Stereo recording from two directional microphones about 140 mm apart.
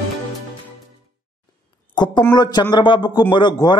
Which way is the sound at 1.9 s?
30° left (ahead or behind).